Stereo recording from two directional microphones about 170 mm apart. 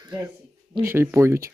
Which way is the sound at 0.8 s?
15° right (ahead or behind).